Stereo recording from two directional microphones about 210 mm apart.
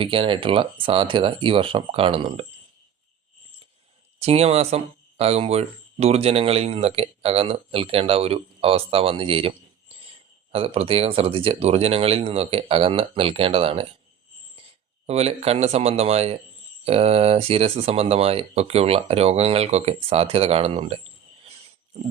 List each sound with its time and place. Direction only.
0.0 s speech: 25° right (ahead or behind)
4.2 s speech: 30° right (ahead or behind)
15.0 s speech: 30° right (ahead or behind)